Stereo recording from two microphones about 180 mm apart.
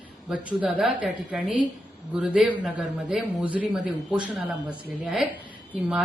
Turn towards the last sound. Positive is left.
turn(degrees=-10)  # may be behind; listen again after turning